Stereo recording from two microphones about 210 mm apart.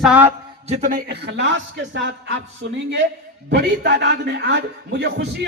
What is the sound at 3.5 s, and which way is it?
A man's voice, 55° right (ahead or behind).